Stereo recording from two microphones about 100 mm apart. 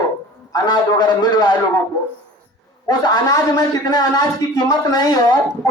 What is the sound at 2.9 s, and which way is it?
Speech, 40° left (ahead or behind).